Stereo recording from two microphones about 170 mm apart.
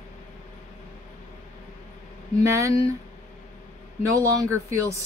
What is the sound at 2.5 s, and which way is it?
Speech, 20° right (ahead or behind).